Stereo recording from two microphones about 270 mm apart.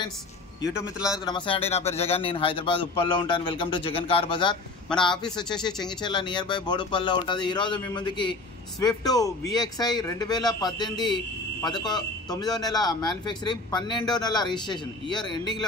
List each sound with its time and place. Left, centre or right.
0.7 s a man's voice: centre
1.2 s a man's voice: centre